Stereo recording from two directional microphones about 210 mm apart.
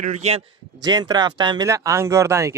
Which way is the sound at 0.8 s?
20° right (ahead or behind).